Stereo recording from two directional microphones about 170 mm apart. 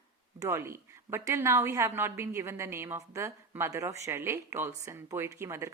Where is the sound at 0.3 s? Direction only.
15° right (ahead or behind).